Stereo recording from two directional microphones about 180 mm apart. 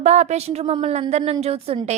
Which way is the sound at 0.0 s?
40° right (ahead or behind).